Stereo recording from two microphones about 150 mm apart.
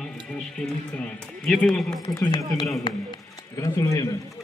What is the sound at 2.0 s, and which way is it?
Speech, 25° left (ahead or behind).